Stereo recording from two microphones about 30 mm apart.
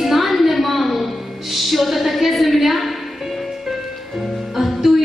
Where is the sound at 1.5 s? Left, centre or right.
Centre.